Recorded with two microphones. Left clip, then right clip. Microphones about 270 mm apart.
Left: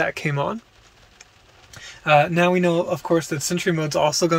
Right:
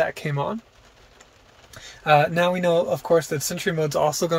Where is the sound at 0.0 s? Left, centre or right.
Centre.